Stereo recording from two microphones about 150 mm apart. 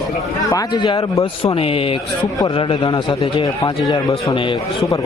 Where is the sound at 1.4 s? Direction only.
40° left (ahead or behind).